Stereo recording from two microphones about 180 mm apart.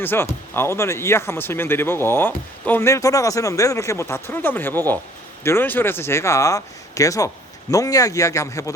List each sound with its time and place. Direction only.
0.0 s speech: 10° left (ahead or behind)